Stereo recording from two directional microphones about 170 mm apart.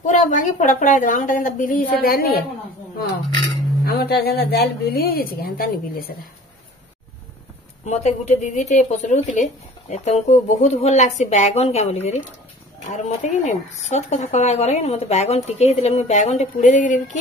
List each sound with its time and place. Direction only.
0.0 s a woman's voice: 45° left (ahead or behind)
3.8 s a woman's voice: 65° left (ahead or behind)
7.8 s speech: 40° left (ahead or behind)